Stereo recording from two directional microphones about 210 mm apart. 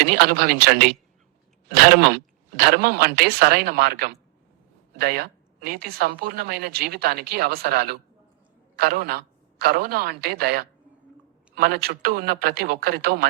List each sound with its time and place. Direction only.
0.0 s a man's voice: 45° right (ahead or behind)